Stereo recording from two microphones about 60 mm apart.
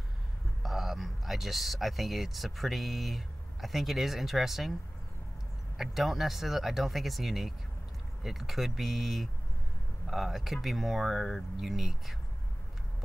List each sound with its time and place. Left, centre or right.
0.6 s speech: centre
5.8 s speech: centre